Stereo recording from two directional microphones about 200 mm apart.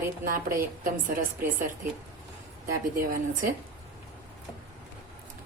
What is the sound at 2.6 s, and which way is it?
Speech, 45° right (ahead or behind).